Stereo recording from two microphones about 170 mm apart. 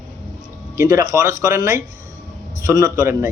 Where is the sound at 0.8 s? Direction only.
20° right (ahead or behind).